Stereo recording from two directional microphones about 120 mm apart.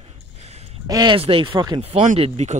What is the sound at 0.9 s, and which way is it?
Speech, 35° right (ahead or behind).